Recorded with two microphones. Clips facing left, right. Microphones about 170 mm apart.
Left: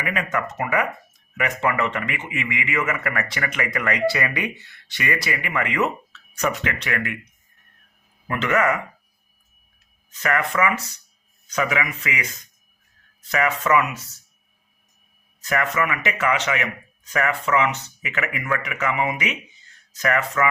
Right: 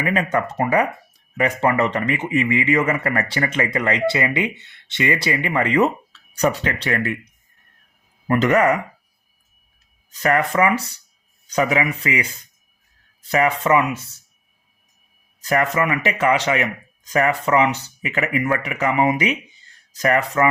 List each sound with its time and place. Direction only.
0.0 s a man's voice: 35° right (ahead or behind)
8.3 s a man's voice: 35° right (ahead or behind)
10.1 s a man's voice: 35° right (ahead or behind)
15.4 s a man's voice: 35° right (ahead or behind)